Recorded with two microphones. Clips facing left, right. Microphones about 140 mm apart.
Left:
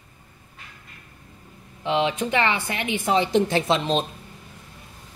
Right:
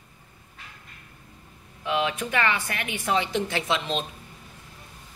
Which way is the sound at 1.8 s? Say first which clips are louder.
Left 4 dB; 30° left (ahead or behind).